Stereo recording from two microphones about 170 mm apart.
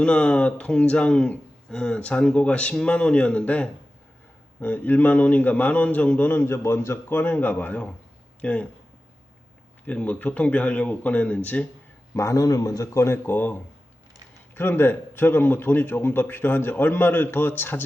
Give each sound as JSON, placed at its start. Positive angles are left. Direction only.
{"t": 0.0, "sound": "speech", "side_deg": 5}
{"t": 9.8, "sound": "speech", "side_deg": 10}
{"t": 12.1, "sound": "speech", "side_deg": 20}